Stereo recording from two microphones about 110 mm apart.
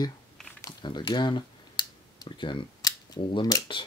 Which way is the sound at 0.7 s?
45° left (ahead or behind).